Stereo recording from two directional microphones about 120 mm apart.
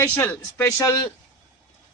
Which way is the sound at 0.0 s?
15° left (ahead or behind).